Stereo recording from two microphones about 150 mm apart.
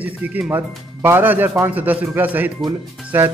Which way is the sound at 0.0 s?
10° right (ahead or behind).